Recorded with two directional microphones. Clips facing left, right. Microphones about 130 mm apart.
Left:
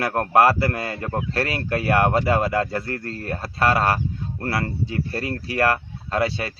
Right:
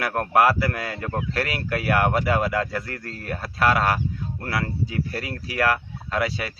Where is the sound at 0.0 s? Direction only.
30° left (ahead or behind).